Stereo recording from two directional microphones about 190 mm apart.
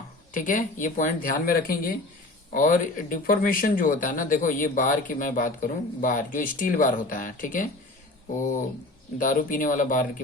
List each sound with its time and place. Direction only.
0.3 s speech: 45° left (ahead or behind)
9.1 s speech: 45° left (ahead or behind)